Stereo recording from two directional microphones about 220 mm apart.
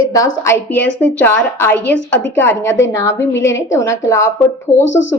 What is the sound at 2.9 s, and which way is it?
A woman's voice, 10° left (ahead or behind).